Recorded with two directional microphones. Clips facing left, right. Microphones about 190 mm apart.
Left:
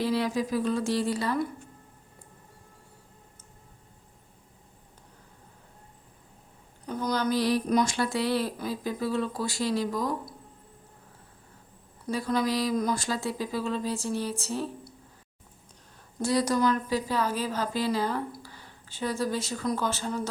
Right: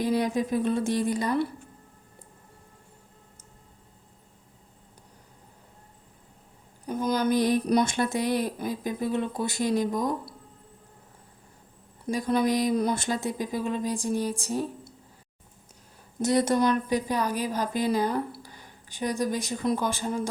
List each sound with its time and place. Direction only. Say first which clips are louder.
0.0 s speech: right 2 dB; 20° right (ahead or behind)
6.8 s a woman's voice: right 3 dB; 15° right (ahead or behind)
12.1 s speech: right 3 dB; 20° right (ahead or behind)
16.2 s speech: right 2 dB; 25° right (ahead or behind)